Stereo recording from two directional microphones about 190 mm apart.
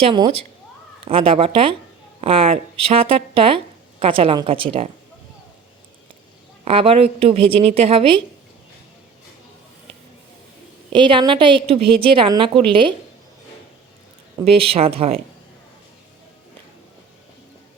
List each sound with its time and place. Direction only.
0.0 s a woman's voice: 25° right (ahead or behind)
6.7 s a woman's voice: 30° right (ahead or behind)
10.9 s a woman's voice: 25° right (ahead or behind)
14.4 s a woman's voice: 30° right (ahead or behind)